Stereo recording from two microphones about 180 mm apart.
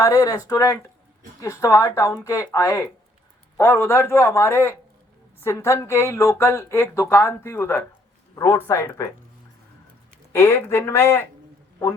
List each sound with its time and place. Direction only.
0.0 s speech: 20° left (ahead or behind)
10.3 s speech: 15° left (ahead or behind)